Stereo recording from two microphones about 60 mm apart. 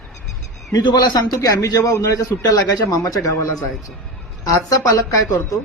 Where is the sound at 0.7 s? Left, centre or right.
Left.